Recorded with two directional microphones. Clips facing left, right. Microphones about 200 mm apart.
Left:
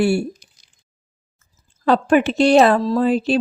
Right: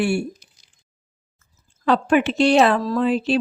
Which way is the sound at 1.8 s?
40° left (ahead or behind).